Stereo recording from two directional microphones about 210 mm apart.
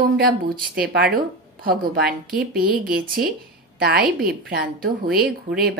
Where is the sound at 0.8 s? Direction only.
50° right (ahead or behind).